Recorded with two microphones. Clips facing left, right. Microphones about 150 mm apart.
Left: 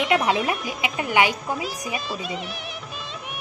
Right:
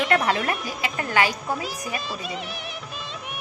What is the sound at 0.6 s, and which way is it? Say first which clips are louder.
Speech: left 2 dB; 20° left (ahead or behind).